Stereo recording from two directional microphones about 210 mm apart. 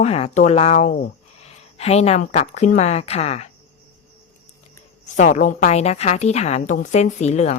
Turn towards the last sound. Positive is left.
turn(degrees=30)  # may be behind; listen again after turning